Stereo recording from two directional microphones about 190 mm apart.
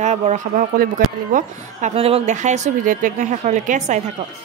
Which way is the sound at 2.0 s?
30° right (ahead or behind).